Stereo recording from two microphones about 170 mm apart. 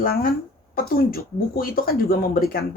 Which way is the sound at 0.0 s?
60° left (ahead or behind).